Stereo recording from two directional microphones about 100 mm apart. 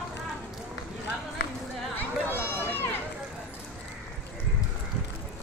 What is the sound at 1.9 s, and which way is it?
Run, 20° left (ahead or behind).